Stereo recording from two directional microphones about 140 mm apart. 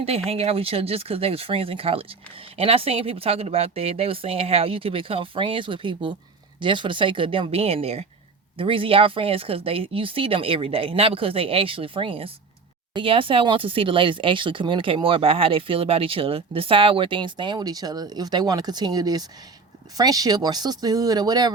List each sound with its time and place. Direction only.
0.3 s speech: 45° right (ahead or behind); by 21.5 s 30° right (ahead or behind)